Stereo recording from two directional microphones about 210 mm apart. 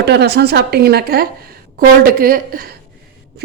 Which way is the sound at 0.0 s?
50° right (ahead or behind).